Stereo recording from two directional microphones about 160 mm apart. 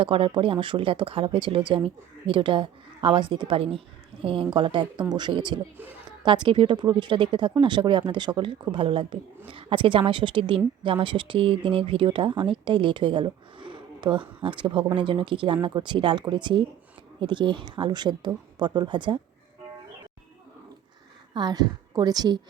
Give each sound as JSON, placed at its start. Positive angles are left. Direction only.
{"t": 0.0, "sound": "a woman's voice", "side_deg": -35}
{"t": 21.3, "sound": "speech", "side_deg": -25}